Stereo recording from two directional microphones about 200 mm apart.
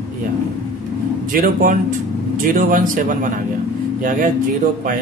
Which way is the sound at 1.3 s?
45° right (ahead or behind).